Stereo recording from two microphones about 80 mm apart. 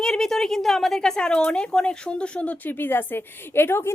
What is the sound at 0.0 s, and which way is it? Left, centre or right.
A woman's voice, centre.